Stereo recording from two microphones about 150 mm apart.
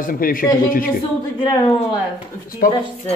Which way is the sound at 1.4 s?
30° left (ahead or behind).